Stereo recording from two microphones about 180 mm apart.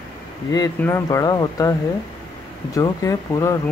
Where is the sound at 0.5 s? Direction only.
15° left (ahead or behind).